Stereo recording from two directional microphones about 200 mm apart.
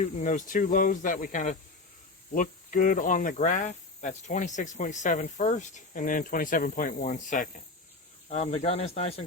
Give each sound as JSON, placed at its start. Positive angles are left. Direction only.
{"t": 0.2, "sound": "speech", "side_deg": 40}
{"t": 8.3, "sound": "speech", "side_deg": 30}